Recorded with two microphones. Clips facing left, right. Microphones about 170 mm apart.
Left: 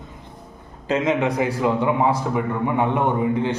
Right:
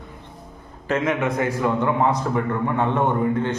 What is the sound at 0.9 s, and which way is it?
A man's voice, 20° left (ahead or behind).